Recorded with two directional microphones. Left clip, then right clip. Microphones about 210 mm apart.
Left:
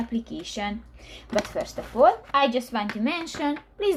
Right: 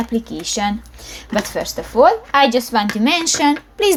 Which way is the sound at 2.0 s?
25° right (ahead or behind).